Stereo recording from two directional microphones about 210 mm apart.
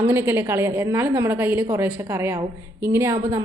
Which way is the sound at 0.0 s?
10° right (ahead or behind).